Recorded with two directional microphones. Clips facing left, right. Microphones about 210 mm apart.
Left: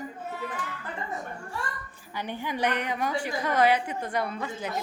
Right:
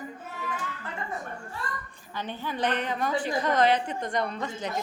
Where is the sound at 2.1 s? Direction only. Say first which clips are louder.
Left 1 dB; 15° left (ahead or behind).